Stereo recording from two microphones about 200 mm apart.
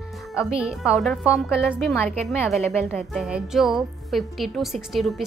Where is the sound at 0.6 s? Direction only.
5° right (ahead or behind).